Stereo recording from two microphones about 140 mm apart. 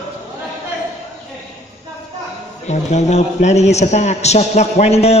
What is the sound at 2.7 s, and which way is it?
A man's voice, 55° left (ahead or behind).